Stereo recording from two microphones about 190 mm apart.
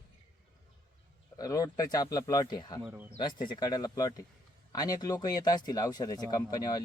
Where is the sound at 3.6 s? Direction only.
20° left (ahead or behind).